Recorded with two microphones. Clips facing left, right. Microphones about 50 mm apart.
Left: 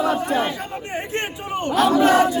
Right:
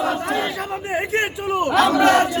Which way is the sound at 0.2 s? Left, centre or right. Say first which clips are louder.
Left 1 dB; right.